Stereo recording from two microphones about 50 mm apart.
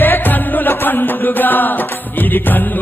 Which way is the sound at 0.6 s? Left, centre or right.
Left.